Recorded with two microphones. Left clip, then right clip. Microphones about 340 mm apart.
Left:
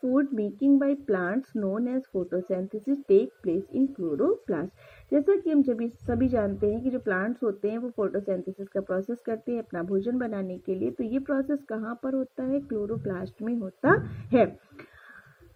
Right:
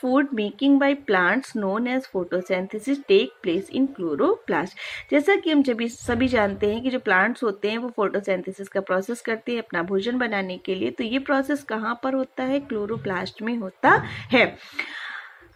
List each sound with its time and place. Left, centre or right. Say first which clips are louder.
0.0 s a woman's voice: right 4 dB; centre